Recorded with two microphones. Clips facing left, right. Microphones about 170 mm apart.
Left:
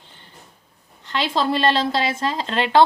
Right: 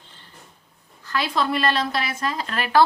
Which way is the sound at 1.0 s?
25° left (ahead or behind).